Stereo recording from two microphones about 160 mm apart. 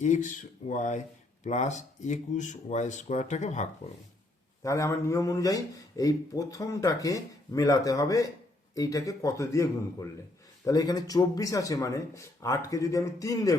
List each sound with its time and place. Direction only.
0.0 s speech: 50° left (ahead or behind)
4.6 s speech: 20° left (ahead or behind)